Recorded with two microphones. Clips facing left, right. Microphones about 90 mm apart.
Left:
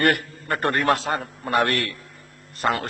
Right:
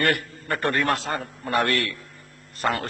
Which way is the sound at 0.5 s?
45° left (ahead or behind).